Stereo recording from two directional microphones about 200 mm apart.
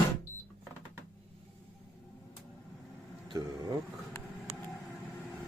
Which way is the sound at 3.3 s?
20° right (ahead or behind).